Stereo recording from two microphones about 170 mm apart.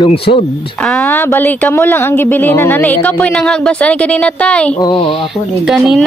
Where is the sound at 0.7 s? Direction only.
5° left (ahead or behind).